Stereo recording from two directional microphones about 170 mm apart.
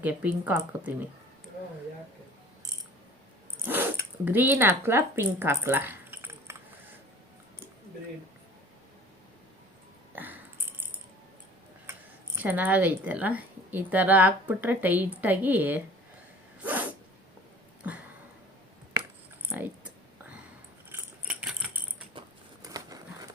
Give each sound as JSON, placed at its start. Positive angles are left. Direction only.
{"t": 0.0, "sound": "speech", "side_deg": -10}
{"t": 3.7, "sound": "speech", "side_deg": -10}
{"t": 10.1, "sound": "a sound", "side_deg": -10}
{"t": 11.9, "sound": "speech", "side_deg": -15}
{"t": 19.5, "sound": "typing", "side_deg": -10}
{"t": 20.9, "sound": "keys jangling", "side_deg": -5}
{"t": 22.6, "sound": "crumpling", "side_deg": -20}